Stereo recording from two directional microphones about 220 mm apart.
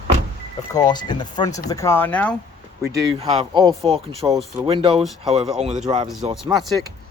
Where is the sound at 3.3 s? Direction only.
25° right (ahead or behind).